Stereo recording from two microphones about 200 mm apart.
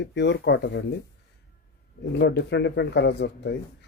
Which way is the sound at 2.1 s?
60° left (ahead or behind).